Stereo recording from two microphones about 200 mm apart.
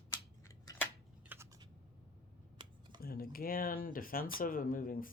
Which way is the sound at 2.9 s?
45° left (ahead or behind).